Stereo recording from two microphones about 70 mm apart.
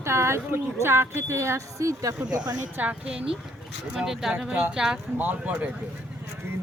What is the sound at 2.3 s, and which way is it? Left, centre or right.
Speech, right.